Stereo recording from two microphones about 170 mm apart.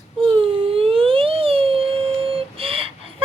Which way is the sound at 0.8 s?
30° right (ahead or behind).